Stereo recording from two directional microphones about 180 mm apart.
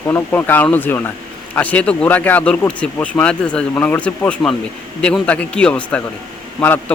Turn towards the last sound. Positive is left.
turn(degrees=5)  # may be behind; listen again after turning